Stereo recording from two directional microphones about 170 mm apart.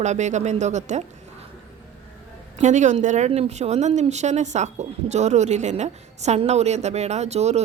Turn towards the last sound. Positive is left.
turn(degrees=-40)  # may be behind; listen again after turning